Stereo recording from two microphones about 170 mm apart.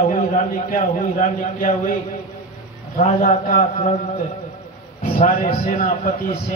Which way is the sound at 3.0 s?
50° left (ahead or behind).